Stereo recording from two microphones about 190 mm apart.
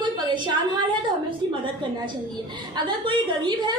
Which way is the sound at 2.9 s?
25° right (ahead or behind).